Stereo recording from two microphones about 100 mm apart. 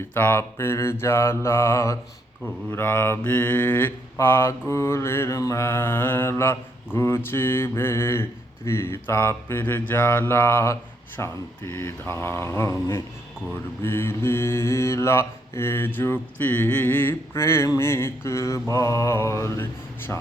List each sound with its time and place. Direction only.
0.1 s mantra: 20° left (ahead or behind)